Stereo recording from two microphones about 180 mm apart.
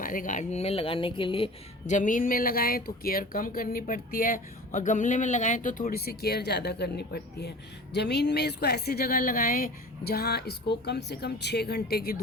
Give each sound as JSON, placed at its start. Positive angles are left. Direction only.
{"t": 0.0, "sound": "speech", "side_deg": 50}
{"t": 1.9, "sound": "a woman's voice", "side_deg": 45}